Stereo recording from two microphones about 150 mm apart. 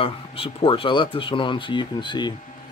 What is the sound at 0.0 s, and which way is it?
Speech, 40° left (ahead or behind).